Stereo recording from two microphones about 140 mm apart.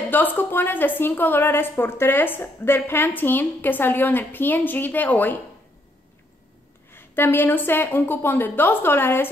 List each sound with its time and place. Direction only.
0.1 s a woman's voice: 15° left (ahead or behind)
6.9 s a woman's voice: 15° left (ahead or behind)